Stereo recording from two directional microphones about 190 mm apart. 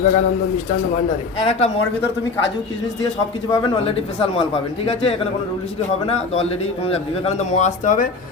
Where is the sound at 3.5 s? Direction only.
30° left (ahead or behind).